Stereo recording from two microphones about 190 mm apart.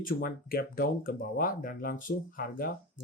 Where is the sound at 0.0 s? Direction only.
45° left (ahead or behind).